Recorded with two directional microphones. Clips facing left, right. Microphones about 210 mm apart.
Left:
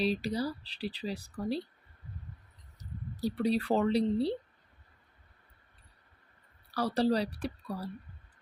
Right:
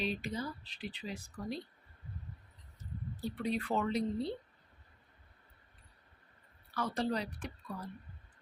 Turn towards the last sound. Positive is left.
turn(degrees=35)  # may be behind; listen again after turning